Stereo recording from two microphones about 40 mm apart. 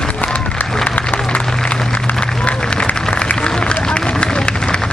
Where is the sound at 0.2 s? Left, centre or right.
Left.